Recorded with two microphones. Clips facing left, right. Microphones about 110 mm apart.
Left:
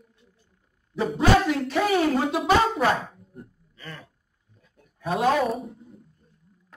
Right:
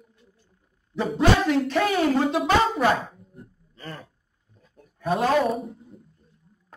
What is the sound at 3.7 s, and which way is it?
Gasp, 40° right (ahead or behind).